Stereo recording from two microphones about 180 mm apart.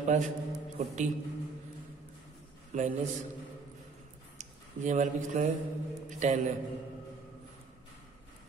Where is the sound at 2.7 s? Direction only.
45° right (ahead or behind).